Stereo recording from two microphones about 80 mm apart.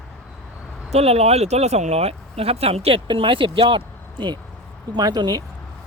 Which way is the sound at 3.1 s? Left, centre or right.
Right.